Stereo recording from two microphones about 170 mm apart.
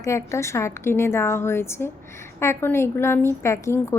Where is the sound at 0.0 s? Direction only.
15° left (ahead or behind).